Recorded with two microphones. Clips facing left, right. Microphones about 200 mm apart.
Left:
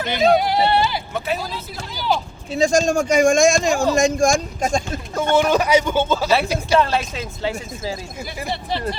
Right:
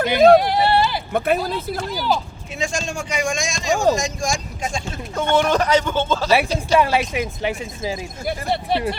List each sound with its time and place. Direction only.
0.0 s speech: 55° right (ahead or behind)
0.3 s speech: centre (ahead or behind)
1.1 s speech: 55° right (ahead or behind)
1.9 s speech: centre (ahead or behind)
2.5 s speech: 35° left (ahead or behind)
5.3 s speech: 10° left (ahead or behind)
6.7 s speech: 10° right (ahead or behind)
8.2 s speech: 55° right (ahead or behind)